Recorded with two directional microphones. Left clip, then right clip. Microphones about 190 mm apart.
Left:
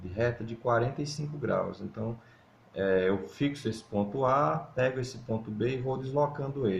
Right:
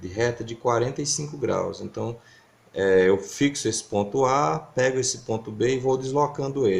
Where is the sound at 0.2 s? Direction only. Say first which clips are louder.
Right 6 dB; 40° right (ahead or behind).